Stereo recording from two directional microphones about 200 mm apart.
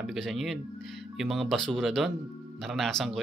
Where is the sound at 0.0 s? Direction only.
Centre (ahead or behind).